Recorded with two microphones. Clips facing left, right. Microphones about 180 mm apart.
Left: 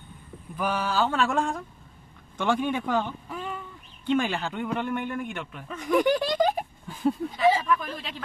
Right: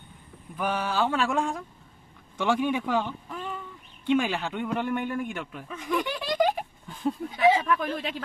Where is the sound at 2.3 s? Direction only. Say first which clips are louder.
Even; 5° right (ahead or behind).